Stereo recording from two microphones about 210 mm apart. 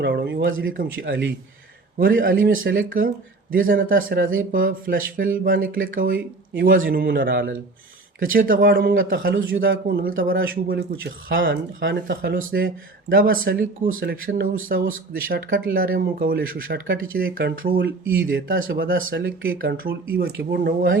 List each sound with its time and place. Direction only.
0.0 s speech: 55° right (ahead or behind)
0.8 s speech: 55° right (ahead or behind)
2.0 s speech: 40° right (ahead or behind)
8.2 s speech: 40° right (ahead or behind)
10.1 s speech: 70° right (ahead or behind)
10.7 s speech: 55° right (ahead or behind)
13.1 s speech: 45° right (ahead or behind); by 17.1 s 60° right (ahead or behind)
17.2 s speech: 45° right (ahead or behind)
18.3 s speech: 65° right (ahead or behind)
18.8 s speech: 45° right (ahead or behind)
19.2 s speech: 70° right (ahead or behind)
19.6 s speech: 45° right (ahead or behind)